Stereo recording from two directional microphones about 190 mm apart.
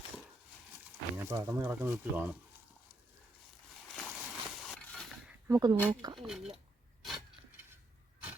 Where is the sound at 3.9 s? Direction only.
Centre (ahead or behind).